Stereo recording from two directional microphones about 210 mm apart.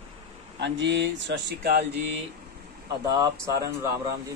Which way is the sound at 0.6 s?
60° right (ahead or behind).